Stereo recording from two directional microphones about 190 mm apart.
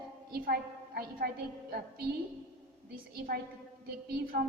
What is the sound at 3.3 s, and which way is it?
A woman's voice, 55° right (ahead or behind).